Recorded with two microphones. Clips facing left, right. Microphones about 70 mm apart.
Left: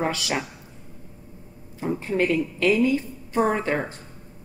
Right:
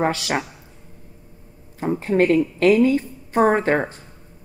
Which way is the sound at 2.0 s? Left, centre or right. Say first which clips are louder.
Right 6 dB; right.